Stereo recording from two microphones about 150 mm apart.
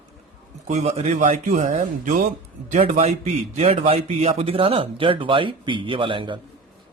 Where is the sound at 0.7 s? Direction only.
45° right (ahead or behind).